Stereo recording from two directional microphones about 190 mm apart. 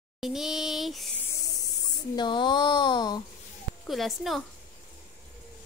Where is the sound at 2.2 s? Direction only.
25° left (ahead or behind).